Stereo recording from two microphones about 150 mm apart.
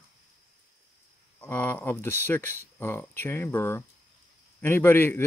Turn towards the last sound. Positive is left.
turn(degrees=15)  # may be behind; listen again after turning